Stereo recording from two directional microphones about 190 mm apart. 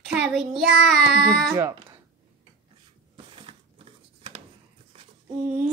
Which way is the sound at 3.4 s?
30° right (ahead or behind).